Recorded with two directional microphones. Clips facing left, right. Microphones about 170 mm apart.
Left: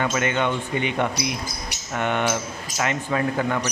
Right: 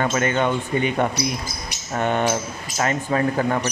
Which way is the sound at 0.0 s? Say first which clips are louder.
Right 2 dB; 40° right (ahead or behind).